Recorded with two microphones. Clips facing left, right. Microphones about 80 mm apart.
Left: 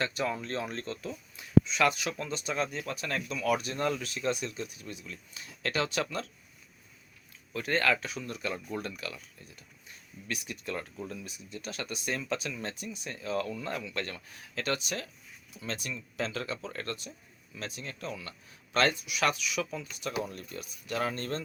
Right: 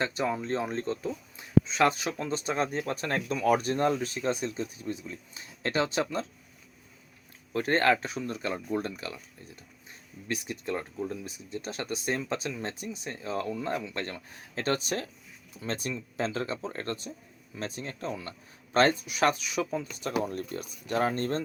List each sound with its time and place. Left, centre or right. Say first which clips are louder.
0.0 s speech: right 3 dB; right
7.5 s speech: right 4 dB; right